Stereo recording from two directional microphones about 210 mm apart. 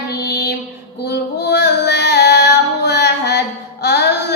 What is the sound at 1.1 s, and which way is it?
Female singing, 50° left (ahead or behind).